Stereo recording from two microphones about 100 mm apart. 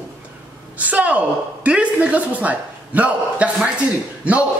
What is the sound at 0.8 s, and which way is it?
A man's voice, 15° right (ahead or behind).